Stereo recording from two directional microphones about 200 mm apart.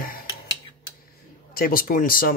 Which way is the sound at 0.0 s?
45° left (ahead or behind).